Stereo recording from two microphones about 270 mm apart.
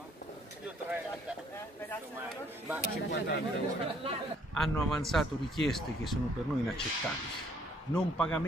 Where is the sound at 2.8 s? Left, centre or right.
Left.